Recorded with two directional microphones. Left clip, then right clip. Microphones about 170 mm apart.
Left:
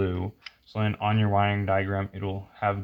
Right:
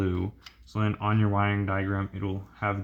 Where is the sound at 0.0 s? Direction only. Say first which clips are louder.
Left 1 dB; 30° left (ahead or behind).